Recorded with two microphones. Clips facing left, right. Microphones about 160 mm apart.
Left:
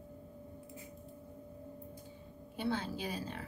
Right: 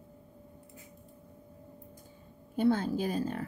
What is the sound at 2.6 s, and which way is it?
Speech, 45° right (ahead or behind).